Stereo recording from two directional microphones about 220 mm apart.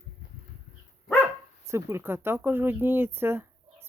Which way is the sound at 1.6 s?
10° right (ahead or behind).